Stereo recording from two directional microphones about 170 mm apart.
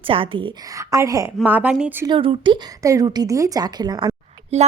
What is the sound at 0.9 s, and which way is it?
Speech, 20° right (ahead or behind).